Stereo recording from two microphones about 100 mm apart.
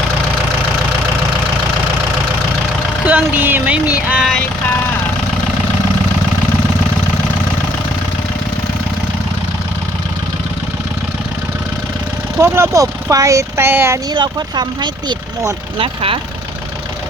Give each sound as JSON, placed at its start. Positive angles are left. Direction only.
{"t": 3.1, "sound": "speech", "side_deg": -20}
{"t": 12.4, "sound": "speech", "side_deg": -25}
{"t": 14.1, "sound": "speech", "side_deg": -45}
{"t": 16.0, "sound": "speech", "side_deg": -65}